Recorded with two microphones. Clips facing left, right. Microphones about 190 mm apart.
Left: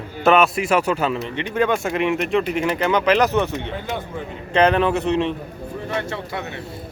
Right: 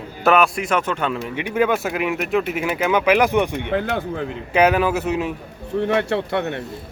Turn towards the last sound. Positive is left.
turn(degrees=-60)  # may be behind; listen again after turning